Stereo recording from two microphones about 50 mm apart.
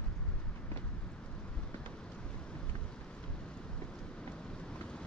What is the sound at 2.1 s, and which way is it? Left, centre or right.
Vehicle, left.